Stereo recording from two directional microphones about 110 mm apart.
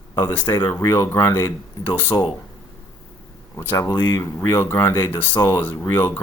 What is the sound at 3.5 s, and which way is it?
Speech, 20° left (ahead or behind).